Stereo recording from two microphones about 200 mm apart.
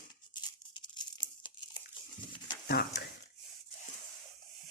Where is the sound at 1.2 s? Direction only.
25° left (ahead or behind).